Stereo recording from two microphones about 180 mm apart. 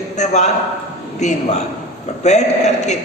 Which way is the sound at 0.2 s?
40° left (ahead or behind).